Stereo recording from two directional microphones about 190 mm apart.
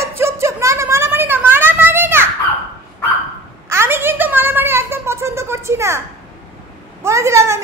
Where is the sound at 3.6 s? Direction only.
15° right (ahead or behind).